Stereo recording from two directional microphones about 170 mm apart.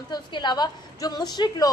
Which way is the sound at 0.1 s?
25° left (ahead or behind).